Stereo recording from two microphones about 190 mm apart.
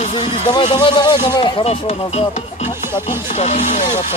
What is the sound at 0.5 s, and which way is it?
Speech, 25° left (ahead or behind).